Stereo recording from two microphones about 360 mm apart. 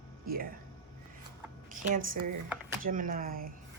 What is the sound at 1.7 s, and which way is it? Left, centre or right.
Speech, right.